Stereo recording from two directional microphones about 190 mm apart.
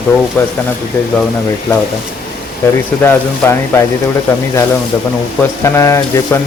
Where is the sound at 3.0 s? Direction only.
10° left (ahead or behind).